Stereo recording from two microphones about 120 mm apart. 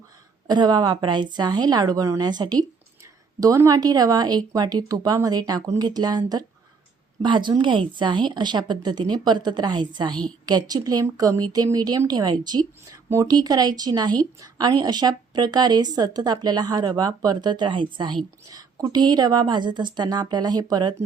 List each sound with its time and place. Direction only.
0.4 s a woman's voice: 35° right (ahead or behind)